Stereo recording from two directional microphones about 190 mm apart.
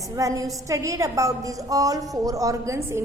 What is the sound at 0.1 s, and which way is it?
A woman's voice, 15° right (ahead or behind).